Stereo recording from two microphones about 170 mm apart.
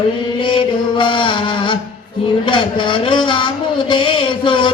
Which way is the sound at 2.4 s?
30° left (ahead or behind).